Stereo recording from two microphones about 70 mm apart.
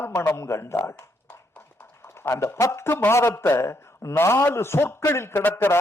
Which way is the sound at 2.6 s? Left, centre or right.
Left.